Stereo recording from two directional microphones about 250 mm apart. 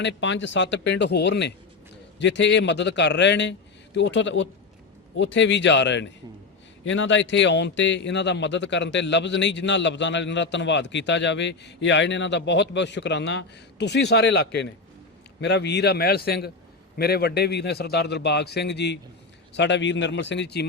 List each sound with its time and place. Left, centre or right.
0.0 s a man's voice: left